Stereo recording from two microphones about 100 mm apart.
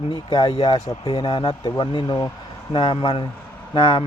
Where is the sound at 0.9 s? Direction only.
40° left (ahead or behind).